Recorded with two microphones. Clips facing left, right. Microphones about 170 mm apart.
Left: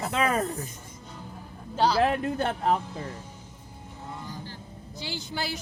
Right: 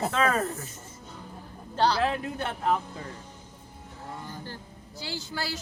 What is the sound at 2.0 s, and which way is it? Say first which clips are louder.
Speech: left 4 dB; 40° left (ahead or behind).